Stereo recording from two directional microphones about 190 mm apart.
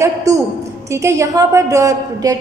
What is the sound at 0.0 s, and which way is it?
A woman's voice, 15° right (ahead or behind).